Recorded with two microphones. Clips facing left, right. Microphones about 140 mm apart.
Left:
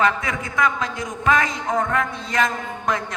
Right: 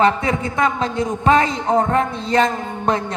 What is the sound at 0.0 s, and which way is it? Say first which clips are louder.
A man's voice: right 5 dB; 30° right (ahead or behind).